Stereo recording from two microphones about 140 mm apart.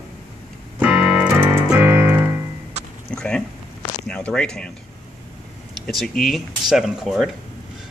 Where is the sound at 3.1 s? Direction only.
5° left (ahead or behind).